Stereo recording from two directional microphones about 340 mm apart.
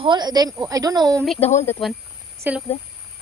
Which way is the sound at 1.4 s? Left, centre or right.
Centre.